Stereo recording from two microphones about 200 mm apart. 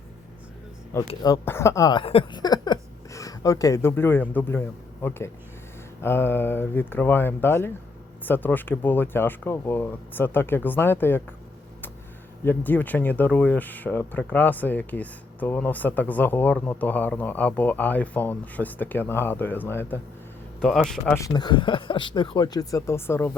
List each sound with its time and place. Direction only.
1.0 s speech: 20° left (ahead or behind)
12.5 s speech: 10° left (ahead or behind)
21.2 s speech: 20° left (ahead or behind)